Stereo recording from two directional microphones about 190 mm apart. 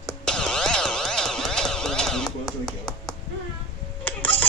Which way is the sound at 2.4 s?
20° left (ahead or behind).